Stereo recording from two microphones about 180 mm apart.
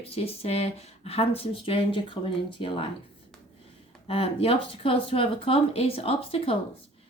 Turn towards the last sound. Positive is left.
turn(degrees=30)  # may be behind; listen again after turning